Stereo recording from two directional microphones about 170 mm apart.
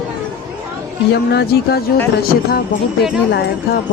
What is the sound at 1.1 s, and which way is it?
Speech, 75° left (ahead or behind).